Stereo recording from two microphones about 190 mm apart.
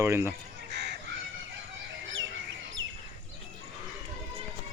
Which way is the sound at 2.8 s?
90° right.